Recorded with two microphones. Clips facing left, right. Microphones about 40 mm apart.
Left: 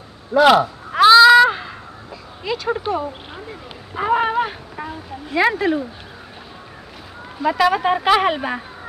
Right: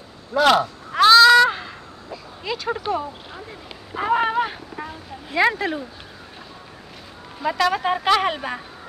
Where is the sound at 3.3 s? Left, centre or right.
Centre.